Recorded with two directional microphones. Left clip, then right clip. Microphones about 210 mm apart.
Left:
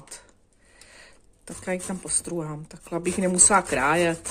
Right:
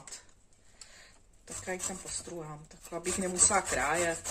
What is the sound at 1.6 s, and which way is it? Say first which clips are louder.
Speech: left 8 dB; 55° left (ahead or behind).